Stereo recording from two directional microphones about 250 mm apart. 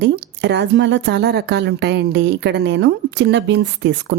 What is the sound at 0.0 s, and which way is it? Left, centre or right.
A woman's voice, right.